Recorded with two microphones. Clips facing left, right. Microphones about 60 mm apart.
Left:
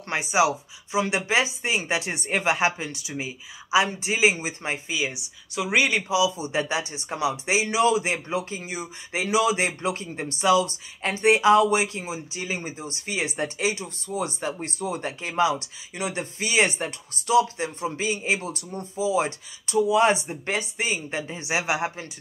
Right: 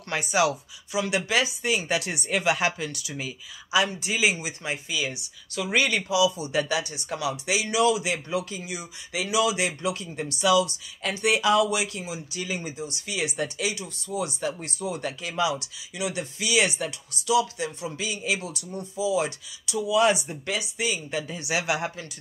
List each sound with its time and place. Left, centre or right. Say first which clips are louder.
0.1 s speech: left 2 dB; left
4.9 s speech: left 2 dB; centre